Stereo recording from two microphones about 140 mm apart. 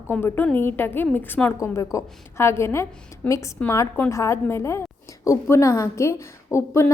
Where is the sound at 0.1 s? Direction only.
15° left (ahead or behind).